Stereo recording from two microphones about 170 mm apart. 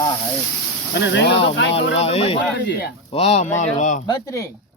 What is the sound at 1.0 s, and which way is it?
Speech, 90° left.